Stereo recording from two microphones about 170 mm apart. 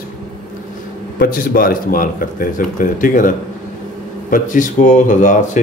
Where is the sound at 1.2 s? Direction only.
60° left (ahead or behind).